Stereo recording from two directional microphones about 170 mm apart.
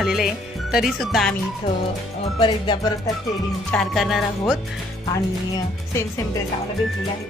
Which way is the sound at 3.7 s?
Centre (ahead or behind).